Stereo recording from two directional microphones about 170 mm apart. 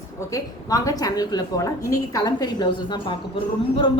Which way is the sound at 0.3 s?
20° left (ahead or behind).